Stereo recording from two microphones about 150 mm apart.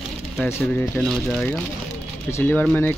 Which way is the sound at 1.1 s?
Centre (ahead or behind).